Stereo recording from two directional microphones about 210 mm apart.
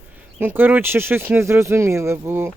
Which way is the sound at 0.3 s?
10° right (ahead or behind).